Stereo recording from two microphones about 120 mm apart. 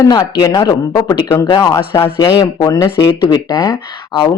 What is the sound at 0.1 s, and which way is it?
Speech, 30° left (ahead or behind).